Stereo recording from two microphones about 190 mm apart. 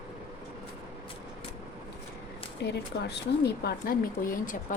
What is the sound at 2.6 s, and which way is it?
A woman's voice, 60° left (ahead or behind).